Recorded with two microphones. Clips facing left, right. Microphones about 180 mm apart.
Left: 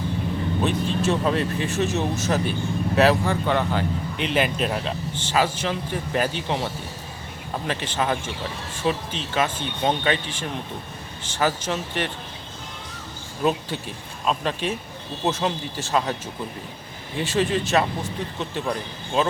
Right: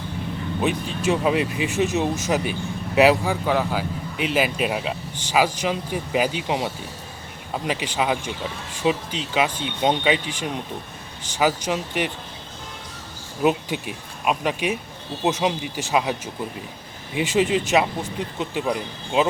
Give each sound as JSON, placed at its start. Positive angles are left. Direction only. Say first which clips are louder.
{"t": 0.6, "sound": "speech", "louder": "right 1 dB", "side_deg": -10}
{"t": 13.4, "sound": "speech", "louder": "right 3 dB", "side_deg": -15}